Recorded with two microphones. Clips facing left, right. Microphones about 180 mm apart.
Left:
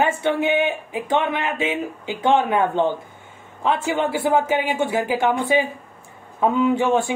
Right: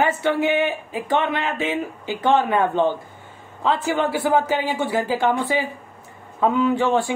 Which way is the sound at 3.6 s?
20° left (ahead or behind).